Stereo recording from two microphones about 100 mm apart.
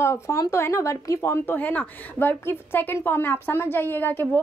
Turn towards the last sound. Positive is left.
turn(degrees=20)  # may be behind; listen again after turning